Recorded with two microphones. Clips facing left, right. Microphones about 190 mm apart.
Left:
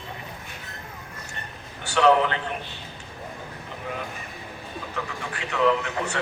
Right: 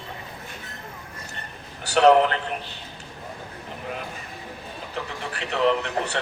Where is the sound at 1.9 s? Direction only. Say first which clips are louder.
Right 2 dB; 40° right (ahead or behind).